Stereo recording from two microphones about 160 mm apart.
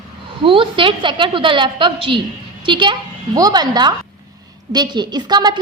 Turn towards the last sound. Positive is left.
turn(degrees=-25)  # may be behind; listen again after turning